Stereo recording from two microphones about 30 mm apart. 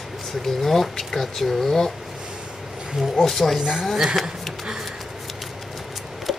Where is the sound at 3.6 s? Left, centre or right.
Centre.